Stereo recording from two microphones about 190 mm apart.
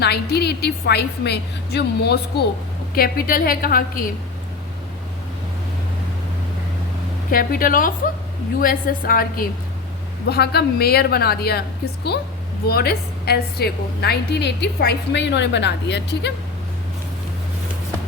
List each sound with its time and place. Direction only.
0.0 s a woman's voice: 60° left (ahead or behind)
7.3 s a woman's voice: 50° left (ahead or behind); by 16.3 s 65° left (ahead or behind)